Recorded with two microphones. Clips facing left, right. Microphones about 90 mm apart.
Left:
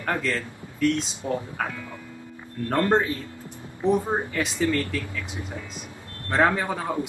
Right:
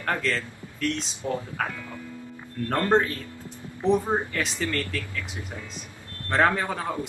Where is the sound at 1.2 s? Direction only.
25° left (ahead or behind).